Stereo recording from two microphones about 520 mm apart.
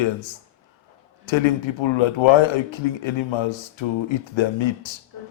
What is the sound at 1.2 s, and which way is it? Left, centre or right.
Speech, left.